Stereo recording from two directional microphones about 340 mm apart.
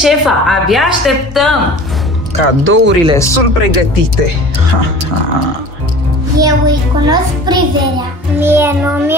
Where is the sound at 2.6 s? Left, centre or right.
Right.